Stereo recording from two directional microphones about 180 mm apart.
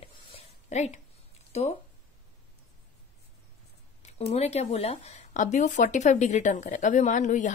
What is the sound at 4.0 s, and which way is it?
Speech, 35° left (ahead or behind).